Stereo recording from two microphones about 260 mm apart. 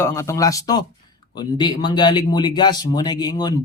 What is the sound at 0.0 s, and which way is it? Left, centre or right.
Speech, centre.